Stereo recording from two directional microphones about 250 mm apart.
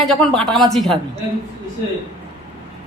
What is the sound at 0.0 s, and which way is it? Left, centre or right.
Speech, centre.